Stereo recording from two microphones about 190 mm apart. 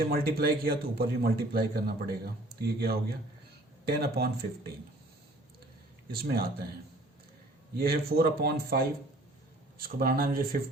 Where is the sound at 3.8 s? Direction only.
55° right (ahead or behind).